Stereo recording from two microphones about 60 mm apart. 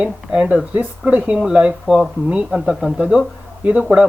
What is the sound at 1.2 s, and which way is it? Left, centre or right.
Speech, centre.